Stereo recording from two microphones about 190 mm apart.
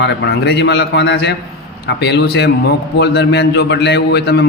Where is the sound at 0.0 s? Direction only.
60° left (ahead or behind).